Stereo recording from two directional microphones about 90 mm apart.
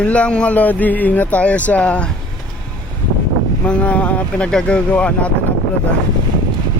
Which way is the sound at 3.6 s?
15° left (ahead or behind).